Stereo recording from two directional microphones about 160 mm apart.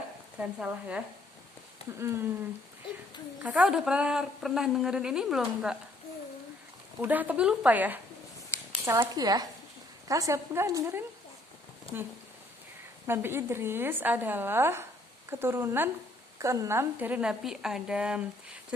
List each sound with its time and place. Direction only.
0.3 s a woman's voice: 10° right (ahead or behind)
3.4 s a woman's voice: 5° right (ahead or behind)
7.0 s a woman's voice: 10° right (ahead or behind)
13.1 s a woman's voice: 15° right (ahead or behind)